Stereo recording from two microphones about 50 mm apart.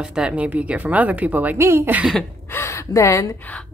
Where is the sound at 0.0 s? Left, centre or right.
Centre.